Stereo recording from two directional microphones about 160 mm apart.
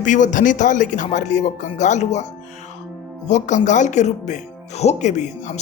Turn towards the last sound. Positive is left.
turn(degrees=45)  # may be behind; listen again after turning